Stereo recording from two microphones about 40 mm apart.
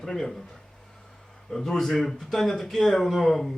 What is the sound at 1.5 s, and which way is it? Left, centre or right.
A man's voice, centre.